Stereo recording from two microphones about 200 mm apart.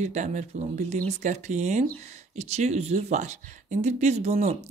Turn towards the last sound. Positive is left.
turn(degrees=-35)  # may be behind; listen again after turning